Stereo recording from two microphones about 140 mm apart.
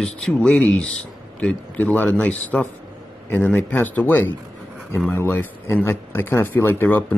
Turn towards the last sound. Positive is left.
turn(degrees=15)  # may be behind; listen again after turning